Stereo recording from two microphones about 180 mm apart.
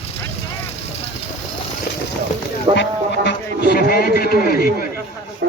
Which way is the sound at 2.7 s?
75° left (ahead or behind).